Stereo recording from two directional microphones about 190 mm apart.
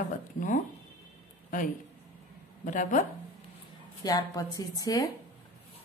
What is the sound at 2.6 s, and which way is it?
Speech, 45° left (ahead or behind).